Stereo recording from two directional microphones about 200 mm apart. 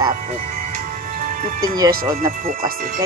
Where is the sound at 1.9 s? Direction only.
45° right (ahead or behind).